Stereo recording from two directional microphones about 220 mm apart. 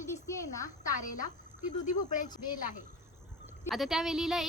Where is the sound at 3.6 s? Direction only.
Centre (ahead or behind).